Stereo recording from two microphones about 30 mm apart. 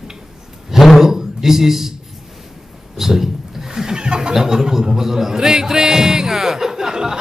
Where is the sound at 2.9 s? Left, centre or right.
Centre; by 4.3 s right.